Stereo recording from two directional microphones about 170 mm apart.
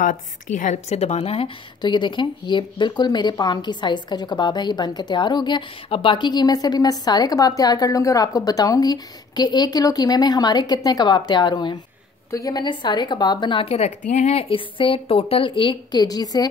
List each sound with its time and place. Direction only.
0.0 s a woman's voice: 50° left (ahead or behind); by 16.4 s 25° left (ahead or behind)